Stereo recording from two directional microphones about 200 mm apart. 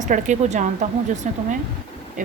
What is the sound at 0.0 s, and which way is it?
A woman's voice, 35° right (ahead or behind).